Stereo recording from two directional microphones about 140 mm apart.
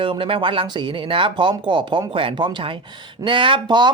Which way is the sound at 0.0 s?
40° right (ahead or behind).